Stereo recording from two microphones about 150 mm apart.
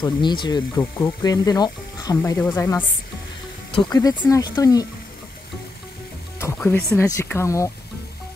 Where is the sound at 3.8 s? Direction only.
25° left (ahead or behind).